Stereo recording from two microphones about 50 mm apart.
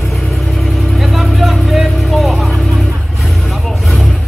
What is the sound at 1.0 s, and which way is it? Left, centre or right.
Vehicle, centre.